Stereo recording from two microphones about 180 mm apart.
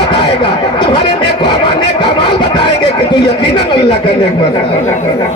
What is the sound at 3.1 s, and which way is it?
Speech, 25° left (ahead or behind).